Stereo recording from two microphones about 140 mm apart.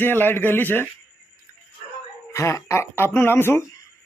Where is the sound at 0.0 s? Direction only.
15° left (ahead or behind).